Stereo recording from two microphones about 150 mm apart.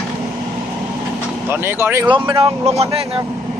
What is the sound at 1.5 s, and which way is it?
Speech, 15° right (ahead or behind).